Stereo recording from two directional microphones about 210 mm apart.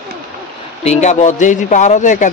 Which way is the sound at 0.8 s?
30° left (ahead or behind).